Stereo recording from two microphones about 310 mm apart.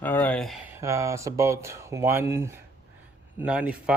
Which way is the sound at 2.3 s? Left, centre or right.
Centre.